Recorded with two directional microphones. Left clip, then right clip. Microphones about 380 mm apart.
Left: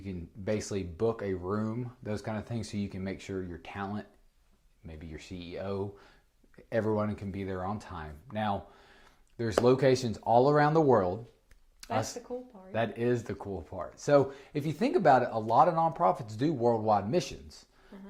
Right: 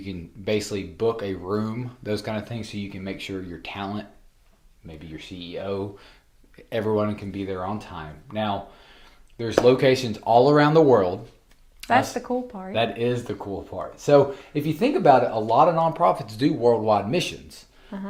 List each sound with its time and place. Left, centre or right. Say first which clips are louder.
0.0 s speech: right 7 dB; left
9.6 s speech: right 7 dB; left